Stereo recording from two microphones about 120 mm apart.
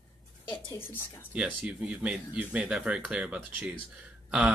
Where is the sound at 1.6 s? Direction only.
10° right (ahead or behind).